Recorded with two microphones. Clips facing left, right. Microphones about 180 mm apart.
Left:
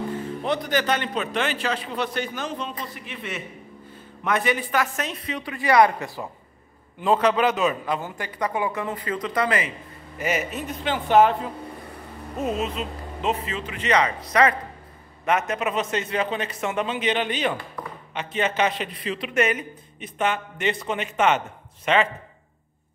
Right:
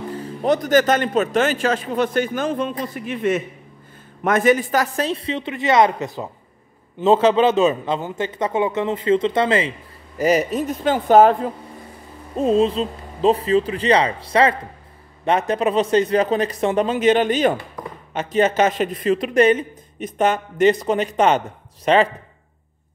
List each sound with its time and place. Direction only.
0.4 s a man's voice: 45° right (ahead or behind); by 9.7 s 25° right (ahead or behind)
10.1 s speech: 35° right (ahead or behind)
12.4 s speech: 30° right (ahead or behind)
17.8 s chop: 20° right (ahead or behind)
18.1 s speech: 40° right (ahead or behind)